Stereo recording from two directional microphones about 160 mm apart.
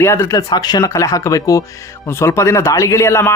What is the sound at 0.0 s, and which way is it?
A man's voice, 15° left (ahead or behind).